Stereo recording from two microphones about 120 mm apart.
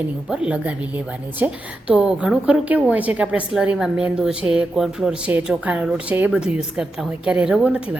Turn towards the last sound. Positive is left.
turn(degrees=-10)  # may be behind; listen again after turning